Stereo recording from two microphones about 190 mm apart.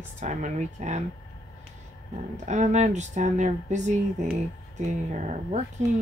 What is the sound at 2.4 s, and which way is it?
Speech, 40° right (ahead or behind).